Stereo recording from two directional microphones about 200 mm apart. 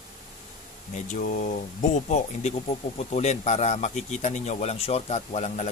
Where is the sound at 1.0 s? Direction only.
40° left (ahead or behind).